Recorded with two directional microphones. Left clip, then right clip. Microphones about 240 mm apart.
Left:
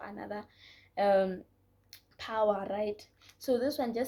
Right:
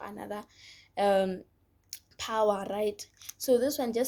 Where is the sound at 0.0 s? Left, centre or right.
Right.